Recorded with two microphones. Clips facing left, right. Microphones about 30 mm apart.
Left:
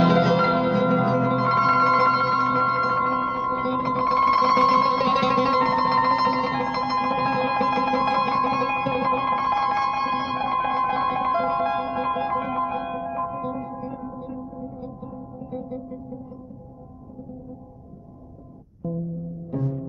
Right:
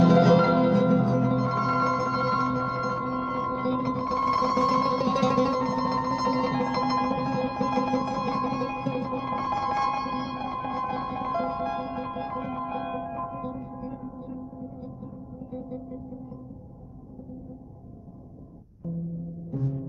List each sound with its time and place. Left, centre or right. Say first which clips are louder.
0.2 s music: even; centre
0.9 s music: left 3 dB; left
2.1 s music: left 5 dB; left
3.2 s music: left 4 dB; centre
3.9 s music: left 10 dB; left
5.5 s music: left 6 dB; left
6.3 s music: left 2 dB; left
7.1 s music: left 5 dB; left
12.7 s music: left 4 dB; centre
13.6 s gong: left 5 dB; left
15.5 s music: left 4 dB; left
19.5 s music: left 4 dB; left